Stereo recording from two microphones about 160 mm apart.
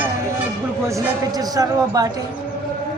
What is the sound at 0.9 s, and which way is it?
Speech, 20° right (ahead or behind).